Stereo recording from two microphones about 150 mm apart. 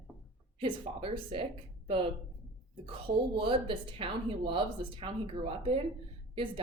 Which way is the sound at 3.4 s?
35° right (ahead or behind).